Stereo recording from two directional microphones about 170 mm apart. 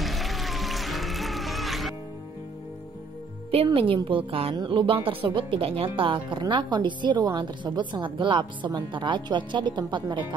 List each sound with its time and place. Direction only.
0.0 s music: centre (ahead or behind)
3.5 s a woman's voice: 30° right (ahead or behind)